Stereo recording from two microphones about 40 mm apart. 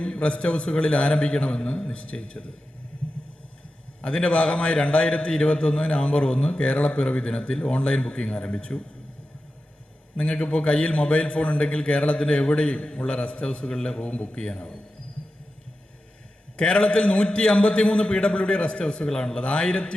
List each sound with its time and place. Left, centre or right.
0.0 s a man's voice: left
4.0 s a man's voice: left
10.2 s a man's voice: left
16.6 s a man's voice: left